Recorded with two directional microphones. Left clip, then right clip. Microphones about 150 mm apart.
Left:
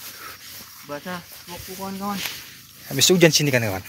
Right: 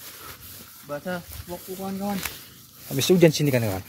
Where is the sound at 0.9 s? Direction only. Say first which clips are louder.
Right 1 dB; 50° right (ahead or behind).